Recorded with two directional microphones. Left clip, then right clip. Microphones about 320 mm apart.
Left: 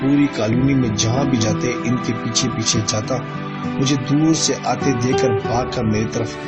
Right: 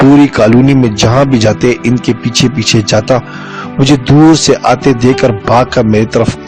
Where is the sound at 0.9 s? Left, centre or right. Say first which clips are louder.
Right 11 dB; right.